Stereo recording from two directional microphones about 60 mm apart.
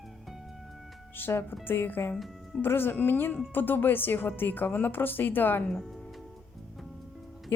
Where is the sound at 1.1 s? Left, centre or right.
Left.